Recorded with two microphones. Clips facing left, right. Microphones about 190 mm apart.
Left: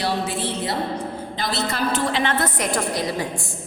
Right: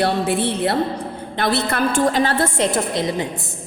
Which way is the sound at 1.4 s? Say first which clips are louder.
Right 6 dB; 60° right (ahead or behind).